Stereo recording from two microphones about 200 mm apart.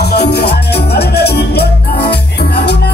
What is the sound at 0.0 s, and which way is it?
Music, 55° left (ahead or behind).